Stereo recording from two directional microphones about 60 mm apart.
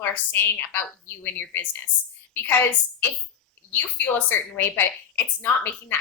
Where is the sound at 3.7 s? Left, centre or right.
Left.